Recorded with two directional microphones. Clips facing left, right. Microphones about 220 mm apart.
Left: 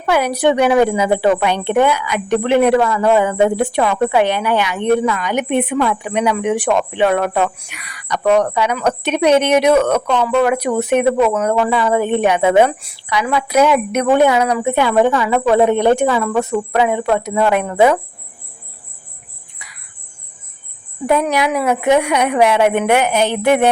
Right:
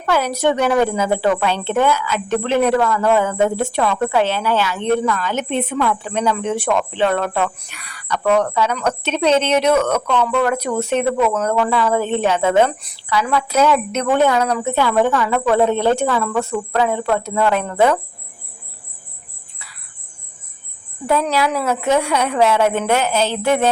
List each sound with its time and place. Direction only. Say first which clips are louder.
0.0 s speech: left 3 dB; 15° left (ahead or behind)
21.1 s speech: left 2 dB; 15° left (ahead or behind)